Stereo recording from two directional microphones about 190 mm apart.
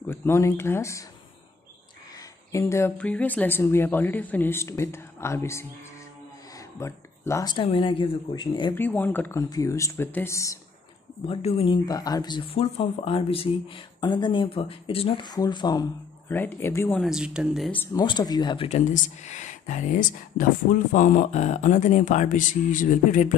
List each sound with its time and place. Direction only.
0.0 s speech: 10° left (ahead or behind)
2.5 s speech: 15° left (ahead or behind)
6.8 s speech: 15° left (ahead or behind)
8.7 s speech: 10° left (ahead or behind)
11.2 s speech: 30° left (ahead or behind); by 17.0 s 15° left (ahead or behind)
17.0 s speech: 5° right (ahead or behind)
17.9 s speech: 20° left (ahead or behind)
18.7 s speech: 40° left (ahead or behind)